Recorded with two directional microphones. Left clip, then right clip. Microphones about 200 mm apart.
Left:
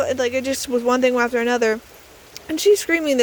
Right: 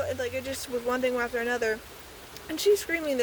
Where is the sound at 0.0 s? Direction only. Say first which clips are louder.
Left 10 dB; 40° left (ahead or behind).